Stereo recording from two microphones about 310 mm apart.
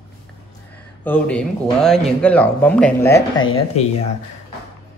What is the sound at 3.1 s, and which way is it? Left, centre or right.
Speech, left.